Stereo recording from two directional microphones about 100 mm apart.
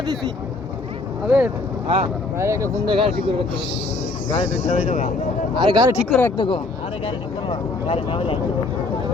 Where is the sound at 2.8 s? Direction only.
60° right (ahead or behind).